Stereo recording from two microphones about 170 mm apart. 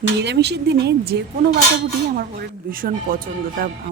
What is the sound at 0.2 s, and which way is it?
Speech, 85° right.